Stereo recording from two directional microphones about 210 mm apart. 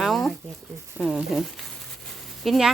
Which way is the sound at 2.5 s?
Centre (ahead or behind).